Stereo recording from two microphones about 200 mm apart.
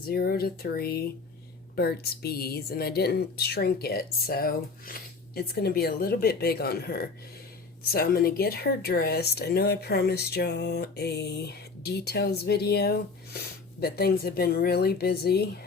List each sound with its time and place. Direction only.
0.0 s speech: 50° left (ahead or behind)